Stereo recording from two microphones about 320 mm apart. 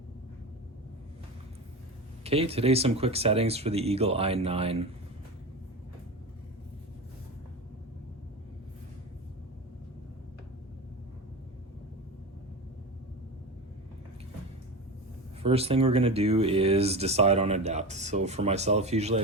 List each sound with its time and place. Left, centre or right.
2.2 s speech: centre
15.4 s speech: centre